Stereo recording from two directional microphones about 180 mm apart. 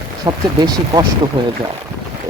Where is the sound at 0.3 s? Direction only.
20° right (ahead or behind).